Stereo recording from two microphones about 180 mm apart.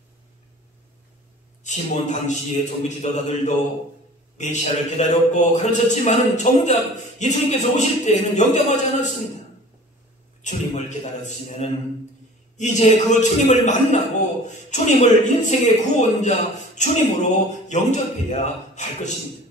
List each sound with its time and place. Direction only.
1.6 s a man's voice: 40° left (ahead or behind)
10.4 s a man's voice: 40° left (ahead or behind)